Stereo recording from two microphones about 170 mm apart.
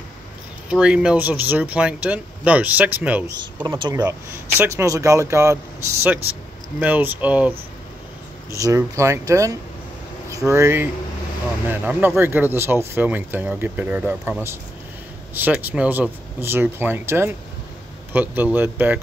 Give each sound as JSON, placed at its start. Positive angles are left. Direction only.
{"t": 0.7, "sound": "speech", "side_deg": -5}
{"t": 3.6, "sound": "speech", "side_deg": -25}
{"t": 6.8, "sound": "speech", "side_deg": -10}